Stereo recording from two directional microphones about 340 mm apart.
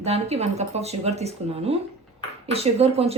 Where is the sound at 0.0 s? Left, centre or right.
Centre.